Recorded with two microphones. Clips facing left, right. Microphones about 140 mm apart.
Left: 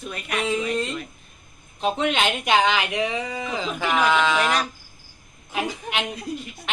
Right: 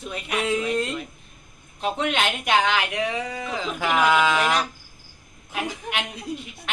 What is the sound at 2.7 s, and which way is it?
Speech, 10° left (ahead or behind).